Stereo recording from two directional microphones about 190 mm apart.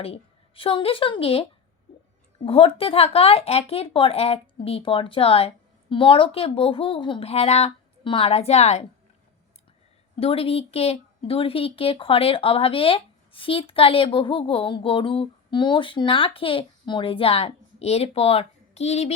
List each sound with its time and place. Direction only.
0.0 s a woman's voice: 30° left (ahead or behind)
10.2 s a woman's voice: 30° left (ahead or behind)